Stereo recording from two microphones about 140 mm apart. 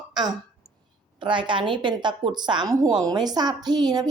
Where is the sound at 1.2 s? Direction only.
35° right (ahead or behind).